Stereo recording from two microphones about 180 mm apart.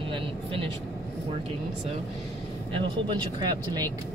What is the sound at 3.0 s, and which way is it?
Speech, 25° right (ahead or behind).